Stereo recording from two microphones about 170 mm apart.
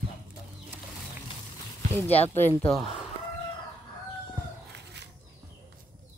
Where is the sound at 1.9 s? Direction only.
10° left (ahead or behind).